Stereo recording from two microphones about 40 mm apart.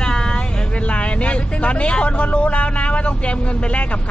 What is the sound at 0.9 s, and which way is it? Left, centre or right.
Speech, left.